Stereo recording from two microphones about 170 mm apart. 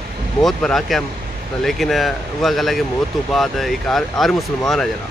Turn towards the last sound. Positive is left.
turn(degrees=0)  # may be behind; listen again after turning